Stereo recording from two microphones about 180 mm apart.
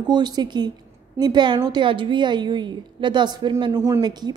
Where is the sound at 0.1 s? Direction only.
25° right (ahead or behind).